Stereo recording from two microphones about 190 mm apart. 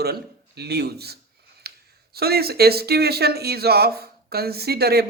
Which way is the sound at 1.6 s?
55° right (ahead or behind).